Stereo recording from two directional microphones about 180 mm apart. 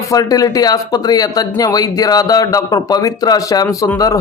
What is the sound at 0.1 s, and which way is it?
Speech, 20° left (ahead or behind).